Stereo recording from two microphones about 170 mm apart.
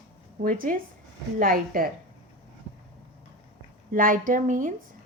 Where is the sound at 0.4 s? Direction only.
55° right (ahead or behind).